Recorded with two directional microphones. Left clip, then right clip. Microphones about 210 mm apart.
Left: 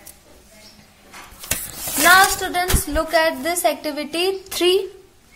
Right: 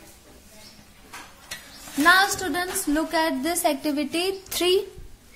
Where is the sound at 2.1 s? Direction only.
10° right (ahead or behind).